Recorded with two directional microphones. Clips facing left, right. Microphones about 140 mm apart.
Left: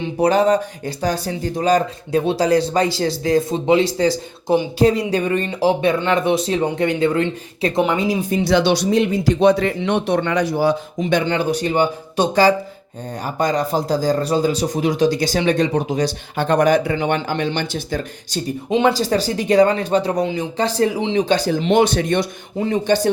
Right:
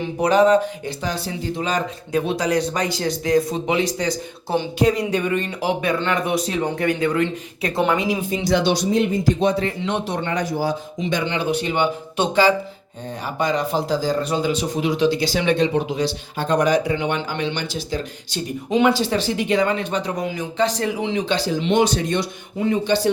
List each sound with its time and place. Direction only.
0.2 s speech: 35° left (ahead or behind)
8.3 s speech: 75° left (ahead or behind)
11.3 s speech: 40° left (ahead or behind)
16.4 s speech: 55° left (ahead or behind)
18.9 s speech: 40° left (ahead or behind); by 22.3 s 60° left (ahead or behind)